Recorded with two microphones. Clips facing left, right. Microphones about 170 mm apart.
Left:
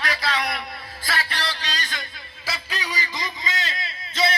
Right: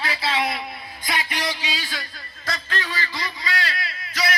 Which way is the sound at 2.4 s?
10° left (ahead or behind).